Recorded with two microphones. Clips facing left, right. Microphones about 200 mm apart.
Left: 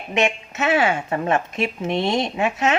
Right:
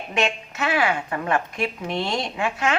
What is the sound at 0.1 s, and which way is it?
A woman's voice, 20° left (ahead or behind).